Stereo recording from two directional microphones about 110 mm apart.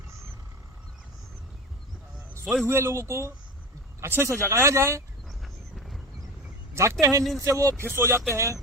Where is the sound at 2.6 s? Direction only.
25° right (ahead or behind).